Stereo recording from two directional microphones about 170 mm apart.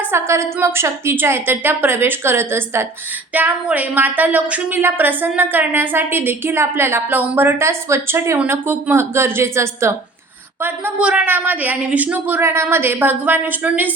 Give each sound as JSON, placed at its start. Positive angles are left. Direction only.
{"t": 0.1, "sound": "a woman's voice", "side_deg": -15}